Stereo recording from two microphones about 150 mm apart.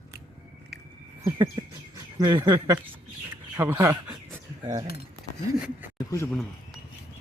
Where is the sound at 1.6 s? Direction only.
25° right (ahead or behind).